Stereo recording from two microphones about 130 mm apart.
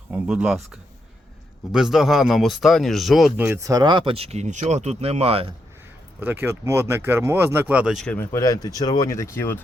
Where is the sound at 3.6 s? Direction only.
30° right (ahead or behind); by 5.5 s 50° right (ahead or behind).